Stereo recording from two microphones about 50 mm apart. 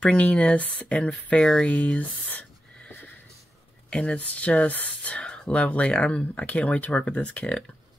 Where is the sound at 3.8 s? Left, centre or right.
Left.